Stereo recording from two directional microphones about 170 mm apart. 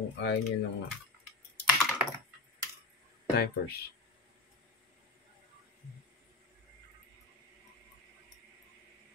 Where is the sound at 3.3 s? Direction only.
70° left (ahead or behind).